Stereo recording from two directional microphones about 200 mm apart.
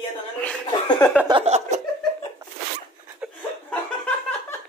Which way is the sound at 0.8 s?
20° left (ahead or behind).